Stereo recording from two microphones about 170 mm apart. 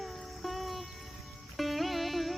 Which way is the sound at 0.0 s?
Centre (ahead or behind).